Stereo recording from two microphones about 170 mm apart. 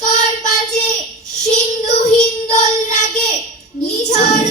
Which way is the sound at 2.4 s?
45° left (ahead or behind).